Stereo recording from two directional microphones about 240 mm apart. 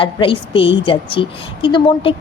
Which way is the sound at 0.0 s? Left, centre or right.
Left.